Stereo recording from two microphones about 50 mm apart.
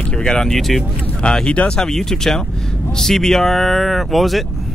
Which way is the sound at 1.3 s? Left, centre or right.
Left.